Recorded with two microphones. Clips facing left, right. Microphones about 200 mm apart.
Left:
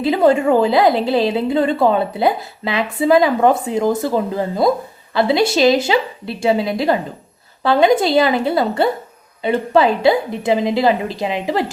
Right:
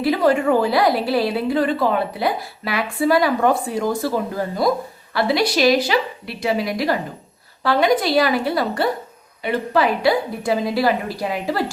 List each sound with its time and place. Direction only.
0.0 s a woman's voice: 25° left (ahead or behind)